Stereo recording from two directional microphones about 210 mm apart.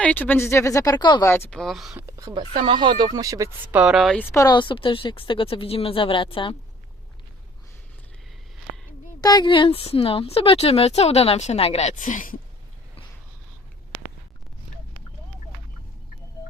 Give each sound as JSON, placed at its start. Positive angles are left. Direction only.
{"t": 0.0, "sound": "speech", "side_deg": 5}
{"t": 1.3, "sound": "speech", "side_deg": 5}
{"t": 2.0, "sound": "speech", "side_deg": -15}
{"t": 9.2, "sound": "speech", "side_deg": 20}